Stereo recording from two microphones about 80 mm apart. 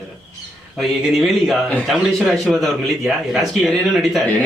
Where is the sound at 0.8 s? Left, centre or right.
Centre.